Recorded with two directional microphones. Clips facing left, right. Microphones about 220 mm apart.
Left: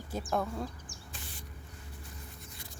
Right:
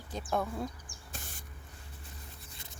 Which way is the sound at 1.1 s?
45° right (ahead or behind).